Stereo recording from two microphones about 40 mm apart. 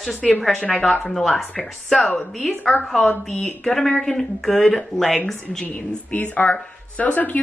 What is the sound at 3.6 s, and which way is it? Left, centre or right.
Speech, centre.